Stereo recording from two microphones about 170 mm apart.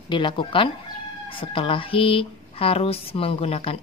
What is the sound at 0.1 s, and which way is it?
Speech, 30° left (ahead or behind).